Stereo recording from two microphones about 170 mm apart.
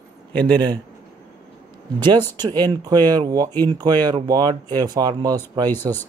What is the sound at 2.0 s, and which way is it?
Speech, 25° right (ahead or behind).